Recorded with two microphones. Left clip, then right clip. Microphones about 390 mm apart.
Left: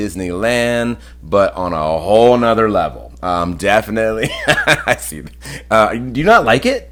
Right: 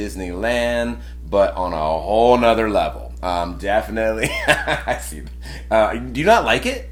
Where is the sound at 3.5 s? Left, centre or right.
Left.